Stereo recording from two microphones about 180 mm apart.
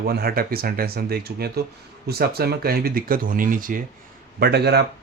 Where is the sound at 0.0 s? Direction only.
60° right (ahead or behind).